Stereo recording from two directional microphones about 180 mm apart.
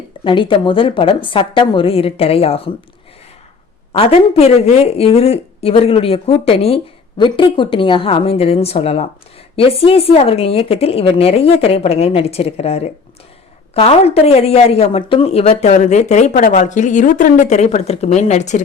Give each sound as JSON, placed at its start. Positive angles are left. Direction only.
{"t": 0.3, "sound": "a woman's voice", "side_deg": 25}
{"t": 3.9, "sound": "a woman's voice", "side_deg": 35}